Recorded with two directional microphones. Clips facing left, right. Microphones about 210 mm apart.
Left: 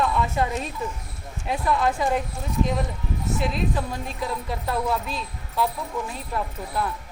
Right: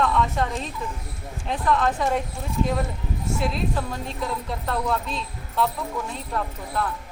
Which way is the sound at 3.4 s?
Centre (ahead or behind).